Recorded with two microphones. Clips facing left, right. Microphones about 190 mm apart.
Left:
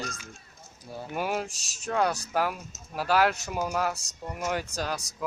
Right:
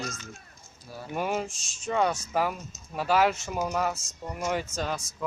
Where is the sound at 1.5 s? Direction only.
35° left (ahead or behind).